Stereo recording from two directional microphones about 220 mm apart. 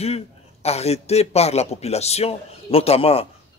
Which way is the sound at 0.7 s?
30° left (ahead or behind).